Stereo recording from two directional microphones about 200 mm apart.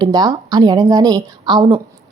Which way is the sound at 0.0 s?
20° right (ahead or behind).